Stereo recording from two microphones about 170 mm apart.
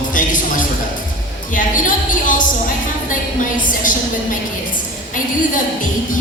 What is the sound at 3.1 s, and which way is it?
A woman's voice, 50° left (ahead or behind).